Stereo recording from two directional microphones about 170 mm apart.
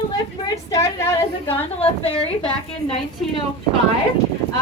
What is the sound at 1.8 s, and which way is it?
Speech, 35° left (ahead or behind).